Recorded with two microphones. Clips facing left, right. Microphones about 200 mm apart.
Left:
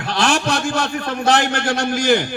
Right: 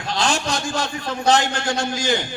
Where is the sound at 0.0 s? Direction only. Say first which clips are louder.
Left 4 dB; 60° left (ahead or behind).